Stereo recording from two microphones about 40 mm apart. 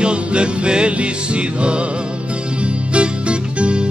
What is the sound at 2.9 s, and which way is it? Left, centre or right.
Music, right.